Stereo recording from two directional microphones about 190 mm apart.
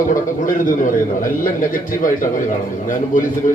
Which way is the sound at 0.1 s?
45° left (ahead or behind).